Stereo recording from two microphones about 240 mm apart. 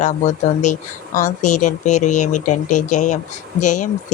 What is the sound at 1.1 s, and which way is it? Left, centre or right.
Speech, left.